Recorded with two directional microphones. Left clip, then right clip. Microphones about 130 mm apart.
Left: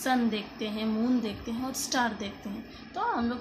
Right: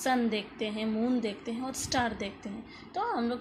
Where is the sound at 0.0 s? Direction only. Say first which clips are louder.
Left 1 dB; 25° right (ahead or behind).